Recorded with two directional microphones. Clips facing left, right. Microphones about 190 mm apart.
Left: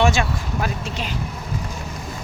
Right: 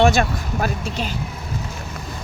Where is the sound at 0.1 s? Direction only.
40° right (ahead or behind).